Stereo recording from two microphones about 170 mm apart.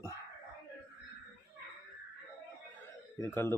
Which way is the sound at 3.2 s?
15° left (ahead or behind).